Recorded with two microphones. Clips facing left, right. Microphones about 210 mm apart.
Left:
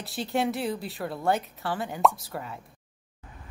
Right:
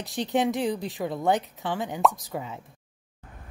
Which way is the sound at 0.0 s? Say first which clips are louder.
Right 3 dB; 15° right (ahead or behind).